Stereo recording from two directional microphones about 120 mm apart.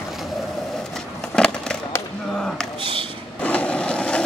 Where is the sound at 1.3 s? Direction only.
5° left (ahead or behind).